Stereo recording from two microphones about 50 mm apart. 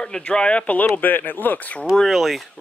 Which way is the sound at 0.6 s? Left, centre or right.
Left.